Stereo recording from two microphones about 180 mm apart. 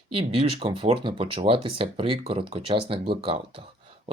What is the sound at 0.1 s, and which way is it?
Speech, 30° right (ahead or behind).